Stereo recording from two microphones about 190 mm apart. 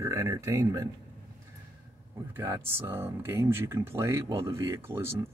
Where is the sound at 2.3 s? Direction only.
15° right (ahead or behind).